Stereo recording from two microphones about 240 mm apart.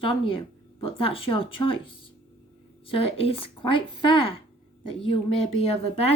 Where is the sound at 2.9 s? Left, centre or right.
Left.